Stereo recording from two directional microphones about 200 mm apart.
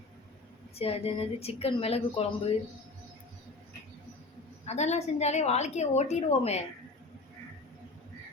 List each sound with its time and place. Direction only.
0.8 s speech: 30° left (ahead or behind)
4.6 s a woman's voice: 35° left (ahead or behind)